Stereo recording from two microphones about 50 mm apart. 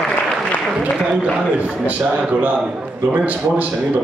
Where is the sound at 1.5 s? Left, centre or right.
Right.